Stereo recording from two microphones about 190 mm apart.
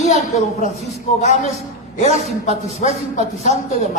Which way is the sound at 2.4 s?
40° left (ahead or behind).